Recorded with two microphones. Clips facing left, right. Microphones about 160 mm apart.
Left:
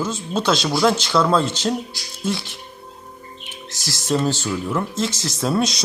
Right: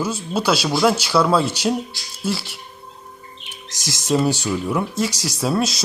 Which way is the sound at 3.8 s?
20° right (ahead or behind).